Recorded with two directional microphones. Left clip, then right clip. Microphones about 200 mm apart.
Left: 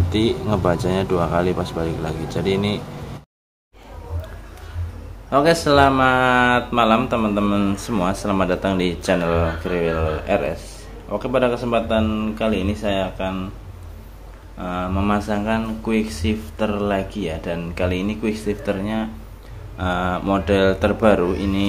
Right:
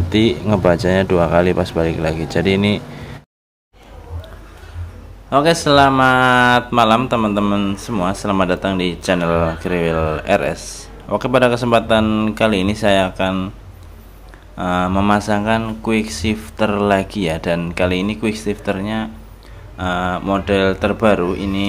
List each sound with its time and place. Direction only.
0.1 s speech: 20° right (ahead or behind)
5.3 s speech: 10° right (ahead or behind)
14.6 s speech: 25° right (ahead or behind); by 21.6 s 5° right (ahead or behind)